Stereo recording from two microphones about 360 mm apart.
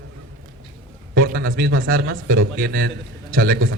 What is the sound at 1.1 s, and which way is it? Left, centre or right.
A man's voice, right.